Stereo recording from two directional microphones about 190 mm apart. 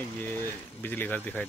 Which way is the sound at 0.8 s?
10° left (ahead or behind).